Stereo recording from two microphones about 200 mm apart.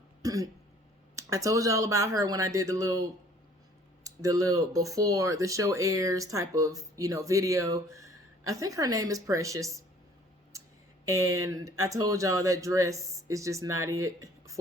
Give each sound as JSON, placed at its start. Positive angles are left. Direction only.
{"t": 0.2, "sound": "throat clearing", "side_deg": -15}
{"t": 1.1, "sound": "speech", "side_deg": -15}
{"t": 11.8, "sound": "speech", "side_deg": -15}